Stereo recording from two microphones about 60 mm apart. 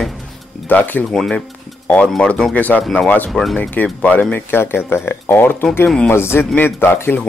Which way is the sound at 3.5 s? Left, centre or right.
Left.